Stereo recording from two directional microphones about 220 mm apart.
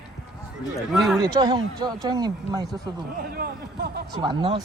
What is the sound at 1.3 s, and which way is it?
Speech, 20° right (ahead or behind).